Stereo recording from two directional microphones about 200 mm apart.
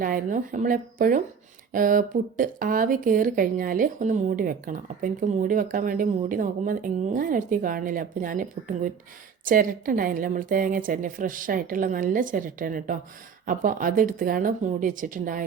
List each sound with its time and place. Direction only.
0.0 s speech: 45° right (ahead or behind)